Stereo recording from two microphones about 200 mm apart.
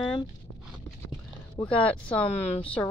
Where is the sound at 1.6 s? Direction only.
5° left (ahead or behind).